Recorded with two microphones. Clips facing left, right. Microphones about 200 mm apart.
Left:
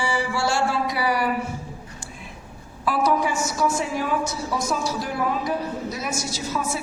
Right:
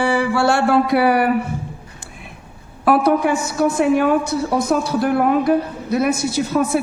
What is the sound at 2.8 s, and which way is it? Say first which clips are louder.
A woman's voice: right 7 dB; 60° right (ahead or behind).